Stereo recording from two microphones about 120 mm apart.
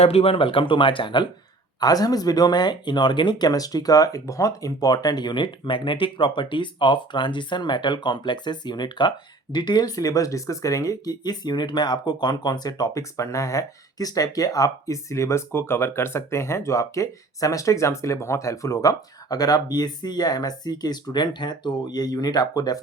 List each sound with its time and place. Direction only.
0.0 s speech: 55° left (ahead or behind); by 22.8 s 30° left (ahead or behind)